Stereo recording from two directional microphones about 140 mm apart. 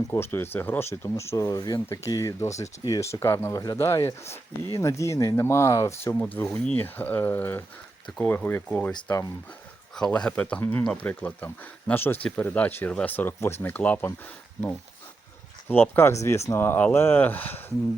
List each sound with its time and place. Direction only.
0.1 s speech: 15° left (ahead or behind)
9.9 s speech: 5° left (ahead or behind)
15.7 s speech: 15° left (ahead or behind)